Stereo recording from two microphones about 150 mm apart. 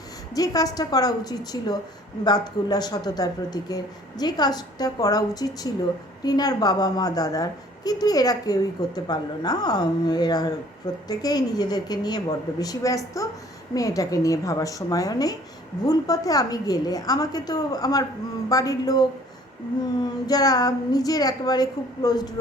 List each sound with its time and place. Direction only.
0.3 s a woman's voice: 25° left (ahead or behind)